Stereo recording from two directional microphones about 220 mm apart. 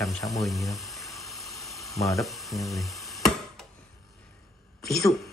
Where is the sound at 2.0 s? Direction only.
15° left (ahead or behind).